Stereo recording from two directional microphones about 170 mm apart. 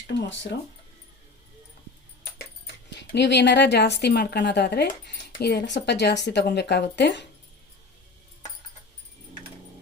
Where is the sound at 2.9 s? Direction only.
85° left.